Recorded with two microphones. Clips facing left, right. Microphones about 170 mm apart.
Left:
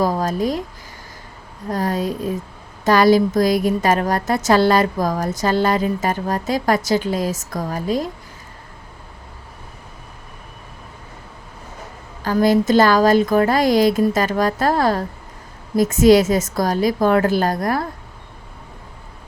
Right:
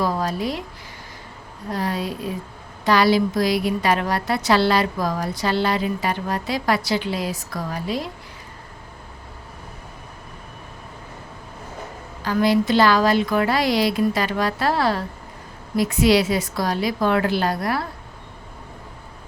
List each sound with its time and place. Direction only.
0.0 s speech: 45° left (ahead or behind)
1.7 s a woman's voice: 45° left (ahead or behind)
12.2 s a woman's voice: 45° left (ahead or behind)